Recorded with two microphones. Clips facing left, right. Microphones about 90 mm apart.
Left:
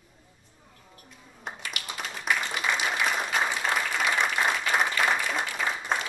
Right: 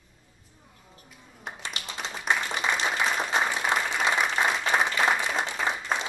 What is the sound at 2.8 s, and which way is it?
Applause, 20° right (ahead or behind).